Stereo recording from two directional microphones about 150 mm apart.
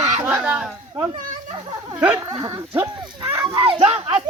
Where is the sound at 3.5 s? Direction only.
35° right (ahead or behind).